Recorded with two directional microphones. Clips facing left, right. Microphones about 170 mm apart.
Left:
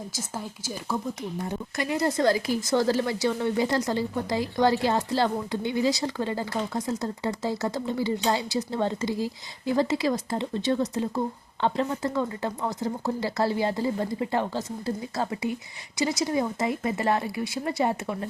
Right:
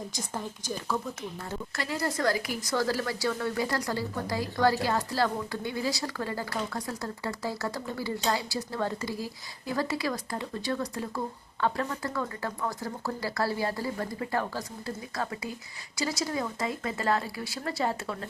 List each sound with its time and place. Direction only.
0.1 s speech: 10° left (ahead or behind)